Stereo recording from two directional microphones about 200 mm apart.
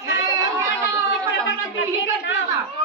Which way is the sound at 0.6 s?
15° right (ahead or behind).